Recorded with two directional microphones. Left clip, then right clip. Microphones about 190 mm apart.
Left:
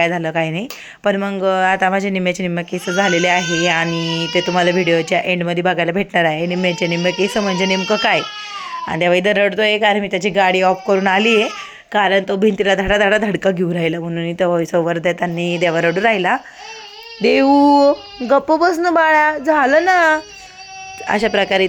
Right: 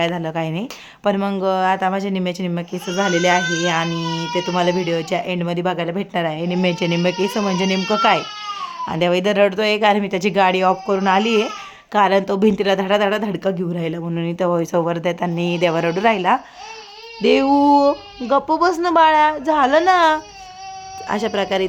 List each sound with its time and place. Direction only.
0.0 s speech: 10° left (ahead or behind)
11.9 s speech: centre (ahead or behind)
14.1 s speech: 5° left (ahead or behind)